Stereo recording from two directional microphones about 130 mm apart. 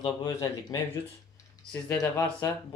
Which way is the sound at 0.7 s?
30° left (ahead or behind).